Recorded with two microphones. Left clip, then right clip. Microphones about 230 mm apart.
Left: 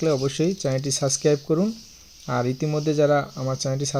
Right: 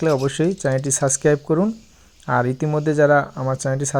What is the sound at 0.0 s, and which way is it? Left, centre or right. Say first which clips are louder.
Speech: right 3 dB; centre.